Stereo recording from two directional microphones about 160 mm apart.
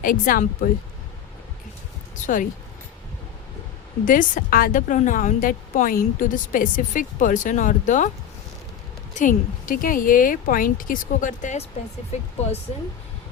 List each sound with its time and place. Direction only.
0.0 s speech: 60° left (ahead or behind)
2.2 s speech: 55° left (ahead or behind)
4.0 s speech: 55° left (ahead or behind)
9.1 s speech: 55° left (ahead or behind)